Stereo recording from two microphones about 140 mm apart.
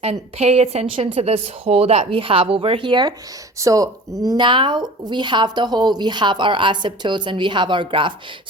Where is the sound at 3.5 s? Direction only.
25° right (ahead or behind).